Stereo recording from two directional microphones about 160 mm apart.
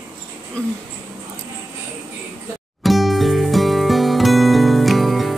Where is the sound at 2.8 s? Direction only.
Centre (ahead or behind).